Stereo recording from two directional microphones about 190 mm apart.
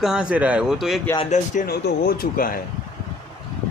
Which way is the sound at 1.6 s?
55° left (ahead or behind).